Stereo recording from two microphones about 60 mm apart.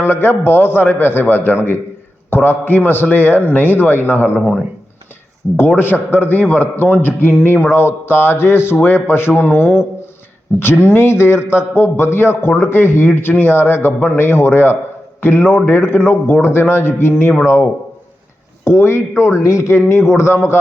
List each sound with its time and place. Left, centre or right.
0.0 s a man's voice: left
5.5 s a man's voice: left
8.7 s a man's voice: left
9.1 s a man's voice: left